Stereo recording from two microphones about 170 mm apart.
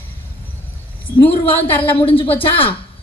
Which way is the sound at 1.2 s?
30° left (ahead or behind).